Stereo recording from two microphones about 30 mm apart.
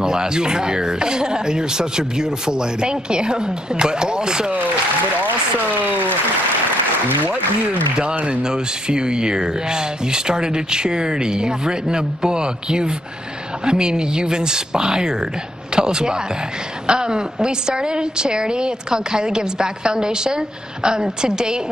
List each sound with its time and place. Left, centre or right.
0.0 s speech: right
8.0 s speech: right